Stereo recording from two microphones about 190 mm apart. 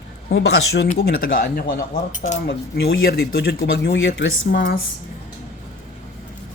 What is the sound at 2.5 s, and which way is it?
Speech, 60° left (ahead or behind).